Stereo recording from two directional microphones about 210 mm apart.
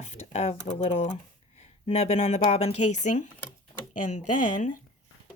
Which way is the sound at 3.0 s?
35° left (ahead or behind).